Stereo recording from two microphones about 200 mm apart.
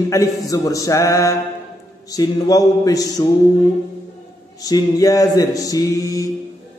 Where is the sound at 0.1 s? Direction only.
15° left (ahead or behind).